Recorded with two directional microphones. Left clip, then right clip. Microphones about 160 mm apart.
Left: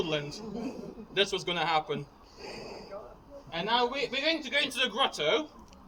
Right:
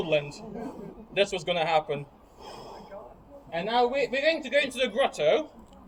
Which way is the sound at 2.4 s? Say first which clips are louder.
Even; 40° left (ahead or behind).